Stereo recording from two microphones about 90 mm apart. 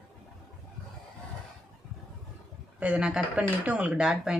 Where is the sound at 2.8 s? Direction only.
10° right (ahead or behind).